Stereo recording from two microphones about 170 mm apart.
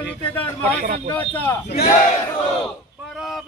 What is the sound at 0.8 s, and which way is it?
Speech, 50° right (ahead or behind).